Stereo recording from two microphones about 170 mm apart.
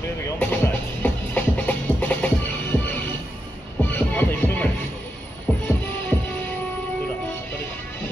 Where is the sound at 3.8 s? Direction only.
10° left (ahead or behind).